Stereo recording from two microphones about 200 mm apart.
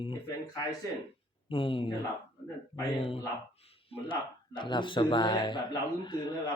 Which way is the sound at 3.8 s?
25° left (ahead or behind).